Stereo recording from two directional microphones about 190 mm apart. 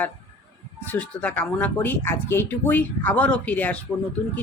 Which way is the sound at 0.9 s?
5° left (ahead or behind).